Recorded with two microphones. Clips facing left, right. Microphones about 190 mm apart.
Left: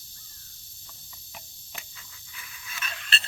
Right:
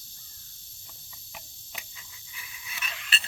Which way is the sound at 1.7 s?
15° right (ahead or behind).